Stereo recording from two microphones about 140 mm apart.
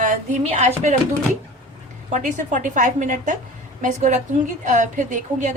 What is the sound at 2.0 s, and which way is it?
A woman's voice, 65° right (ahead or behind).